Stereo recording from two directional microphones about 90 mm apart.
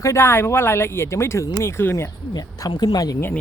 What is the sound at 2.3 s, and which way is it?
Speech, 45° left (ahead or behind).